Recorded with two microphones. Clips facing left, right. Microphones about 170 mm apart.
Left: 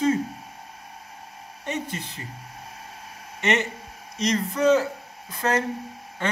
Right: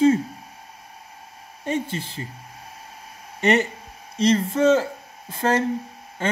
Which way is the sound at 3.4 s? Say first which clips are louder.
Right 5 dB; 35° right (ahead or behind).